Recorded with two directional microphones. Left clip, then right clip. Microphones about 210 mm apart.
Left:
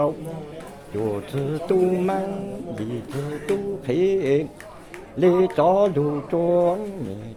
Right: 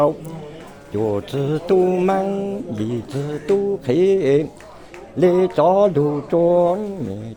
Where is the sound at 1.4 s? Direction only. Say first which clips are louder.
Right 4 dB; 40° right (ahead or behind).